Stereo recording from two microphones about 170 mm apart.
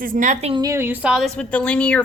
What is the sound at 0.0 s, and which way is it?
Speech, 50° right (ahead or behind).